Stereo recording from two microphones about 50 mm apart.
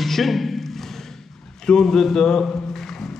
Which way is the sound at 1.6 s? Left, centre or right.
Centre.